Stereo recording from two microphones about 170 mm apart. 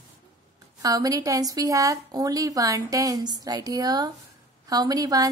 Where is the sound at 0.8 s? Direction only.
20° right (ahead or behind).